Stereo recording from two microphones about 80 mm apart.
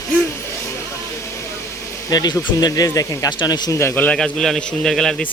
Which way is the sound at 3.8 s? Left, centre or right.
Left.